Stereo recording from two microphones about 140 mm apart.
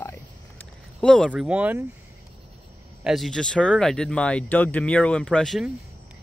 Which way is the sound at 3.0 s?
Centre (ahead or behind).